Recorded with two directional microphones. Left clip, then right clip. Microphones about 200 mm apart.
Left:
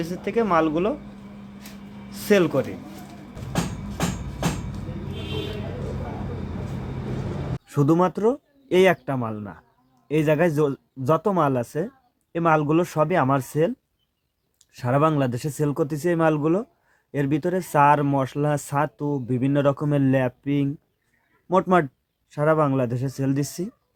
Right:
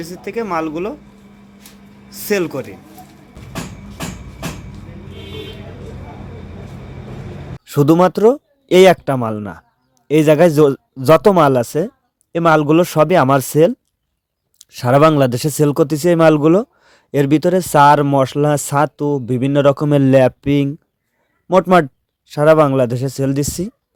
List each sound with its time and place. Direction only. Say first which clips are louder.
0.0 s speech: right 1 dB; 5° right (ahead or behind)
2.0 s speech: right 1 dB; centre (ahead or behind)
7.6 s speech: right 9 dB; 50° right (ahead or behind)